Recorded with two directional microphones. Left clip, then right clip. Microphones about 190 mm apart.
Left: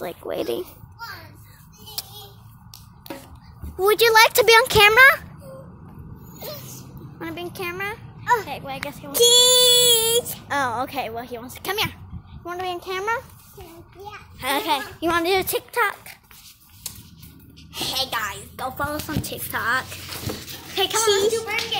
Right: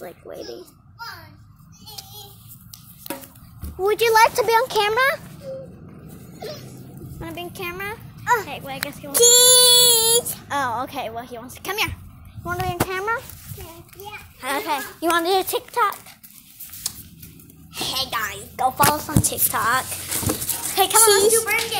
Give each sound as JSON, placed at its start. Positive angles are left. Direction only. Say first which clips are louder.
{"t": 0.3, "sound": "speech", "louder": "left 10 dB", "side_deg": 40}
{"t": 3.8, "sound": "speech", "louder": "left 1 dB", "side_deg": 35}
{"t": 7.2, "sound": "a woman's voice", "louder": "left 1 dB", "side_deg": 15}
{"t": 8.2, "sound": "a sound", "louder": "even", "side_deg": -15}
{"t": 8.5, "sound": "a woman's voice", "louder": "even", "side_deg": 10}
{"t": 10.5, "sound": "a woman's voice", "louder": "even", "side_deg": 20}
{"t": 14.4, "sound": "a child's voice", "louder": "left 2 dB", "side_deg": 25}
{"t": 15.0, "sound": "a woman's voice", "louder": "right 4 dB", "side_deg": 5}
{"t": 15.8, "sound": "a sound", "louder": "right 2 dB", "side_deg": 20}
{"t": 16.8, "sound": "a sound", "louder": "right 6 dB", "side_deg": -25}
{"t": 17.7, "sound": "a woman's voice", "louder": "even", "side_deg": 5}